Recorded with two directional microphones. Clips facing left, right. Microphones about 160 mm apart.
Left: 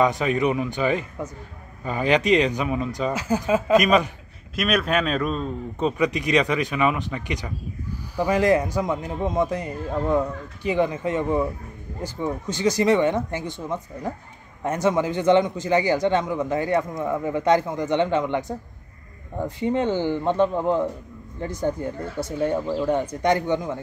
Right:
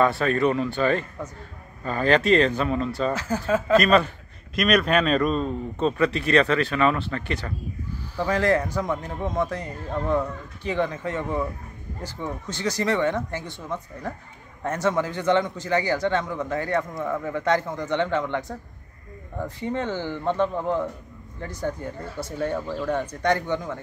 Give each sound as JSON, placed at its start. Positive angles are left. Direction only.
{"t": 0.0, "sound": "a man's voice", "side_deg": 15}
{"t": 5.8, "sound": "a man's voice", "side_deg": 15}